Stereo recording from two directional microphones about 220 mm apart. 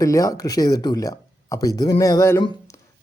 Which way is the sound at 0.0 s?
15° left (ahead or behind).